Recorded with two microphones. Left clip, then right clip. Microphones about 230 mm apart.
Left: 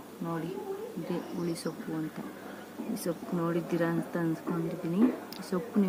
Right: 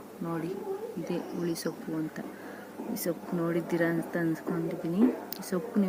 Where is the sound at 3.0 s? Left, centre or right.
Centre.